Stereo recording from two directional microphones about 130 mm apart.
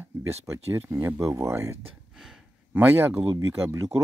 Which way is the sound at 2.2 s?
5° right (ahead or behind).